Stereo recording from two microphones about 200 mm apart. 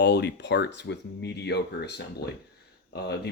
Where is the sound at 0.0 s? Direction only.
60° left (ahead or behind).